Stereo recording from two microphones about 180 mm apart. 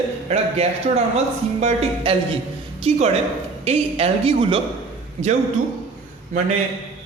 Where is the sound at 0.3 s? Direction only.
35° right (ahead or behind).